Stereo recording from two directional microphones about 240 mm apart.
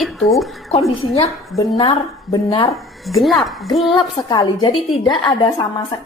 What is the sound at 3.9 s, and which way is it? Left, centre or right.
A woman's voice, centre.